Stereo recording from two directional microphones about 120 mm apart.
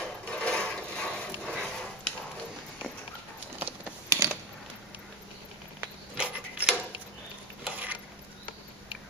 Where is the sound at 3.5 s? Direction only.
15° right (ahead or behind).